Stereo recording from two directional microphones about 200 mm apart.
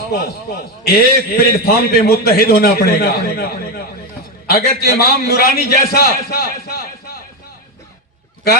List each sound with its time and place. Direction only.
0.1 s a man's voice: 50° left (ahead or behind)